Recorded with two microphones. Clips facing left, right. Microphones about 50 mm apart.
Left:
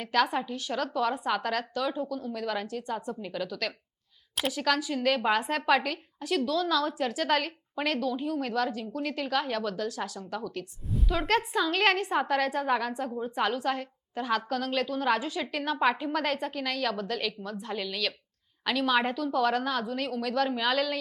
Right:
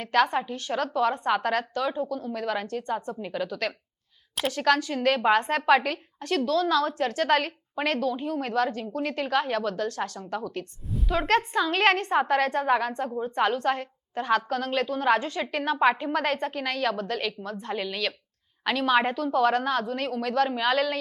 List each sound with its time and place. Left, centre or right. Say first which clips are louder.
0.0 s a woman's voice: right 3 dB; centre
4.4 s a woman's voice: right 4 dB; centre
10.6 s a woman's voice: right 1 dB; centre
17.7 s a woman's voice: right 2 dB; centre